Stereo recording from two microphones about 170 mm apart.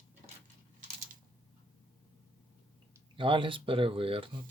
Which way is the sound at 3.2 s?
30° right (ahead or behind).